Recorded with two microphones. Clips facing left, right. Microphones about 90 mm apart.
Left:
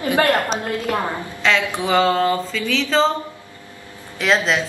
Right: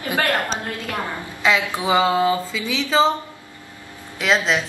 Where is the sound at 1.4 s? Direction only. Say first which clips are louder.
Even; 10° right (ahead or behind).